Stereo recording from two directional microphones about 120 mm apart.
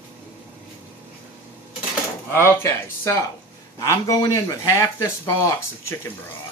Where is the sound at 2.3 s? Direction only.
20° left (ahead or behind).